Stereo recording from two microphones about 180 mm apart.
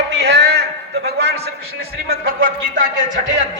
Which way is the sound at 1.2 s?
60° right (ahead or behind).